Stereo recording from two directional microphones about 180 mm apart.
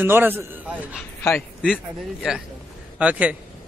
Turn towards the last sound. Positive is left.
turn(degrees=-5)  # may be behind; listen again after turning